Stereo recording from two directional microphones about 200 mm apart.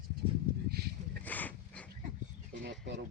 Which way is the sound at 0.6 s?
50° right (ahead or behind).